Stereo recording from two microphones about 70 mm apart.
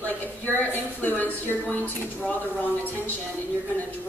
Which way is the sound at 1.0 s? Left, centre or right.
Left.